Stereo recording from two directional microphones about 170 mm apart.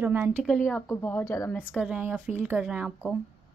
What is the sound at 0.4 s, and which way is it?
Speech, centre (ahead or behind).